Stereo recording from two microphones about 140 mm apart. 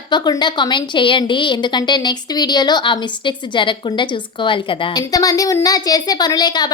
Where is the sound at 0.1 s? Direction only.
30° left (ahead or behind).